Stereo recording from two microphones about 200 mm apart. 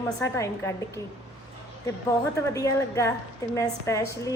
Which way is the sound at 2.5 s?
15° left (ahead or behind).